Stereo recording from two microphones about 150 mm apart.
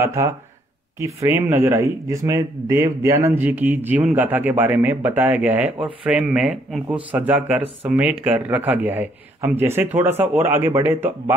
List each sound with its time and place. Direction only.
0.0 s a man's voice: 20° right (ahead or behind)